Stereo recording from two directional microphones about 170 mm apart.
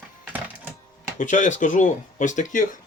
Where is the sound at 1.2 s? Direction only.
45° left (ahead or behind).